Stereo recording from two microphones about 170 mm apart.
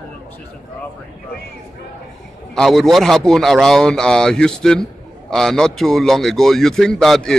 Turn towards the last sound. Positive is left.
turn(degrees=5)  # may be behind; listen again after turning